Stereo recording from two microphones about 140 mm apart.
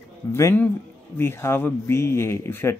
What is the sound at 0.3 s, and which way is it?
Speech, 20° left (ahead or behind).